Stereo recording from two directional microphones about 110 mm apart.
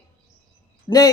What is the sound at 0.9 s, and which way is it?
Speech, 30° left (ahead or behind).